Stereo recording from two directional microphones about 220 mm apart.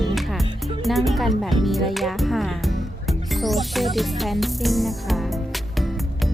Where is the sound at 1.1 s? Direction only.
Centre (ahead or behind).